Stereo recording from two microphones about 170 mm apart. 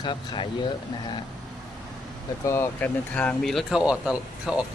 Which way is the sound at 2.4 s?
15° left (ahead or behind).